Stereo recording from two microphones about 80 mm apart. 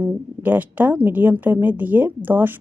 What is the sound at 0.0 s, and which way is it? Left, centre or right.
A woman's voice, right.